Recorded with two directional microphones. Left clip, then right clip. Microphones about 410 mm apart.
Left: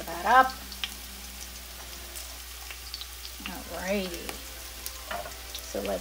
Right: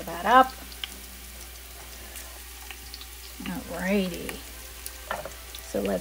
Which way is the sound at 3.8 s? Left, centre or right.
Centre.